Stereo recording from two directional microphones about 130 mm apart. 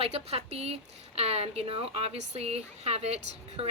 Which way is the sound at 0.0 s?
50° right (ahead or behind).